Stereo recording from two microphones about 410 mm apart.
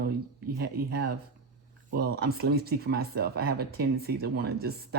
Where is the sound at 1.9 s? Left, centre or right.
Right.